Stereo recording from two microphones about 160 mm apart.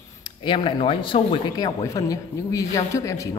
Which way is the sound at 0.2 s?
30° left (ahead or behind).